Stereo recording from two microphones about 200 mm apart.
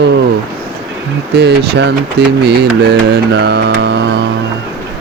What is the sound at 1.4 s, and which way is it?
Speech, 60° right (ahead or behind).